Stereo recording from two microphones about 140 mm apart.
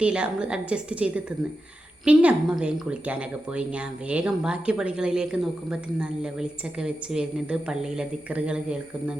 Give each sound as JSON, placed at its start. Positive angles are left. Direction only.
{"t": 0.0, "sound": "a woman's voice", "side_deg": -10}